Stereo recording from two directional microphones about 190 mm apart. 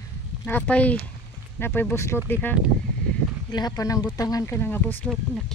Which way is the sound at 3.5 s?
20° left (ahead or behind).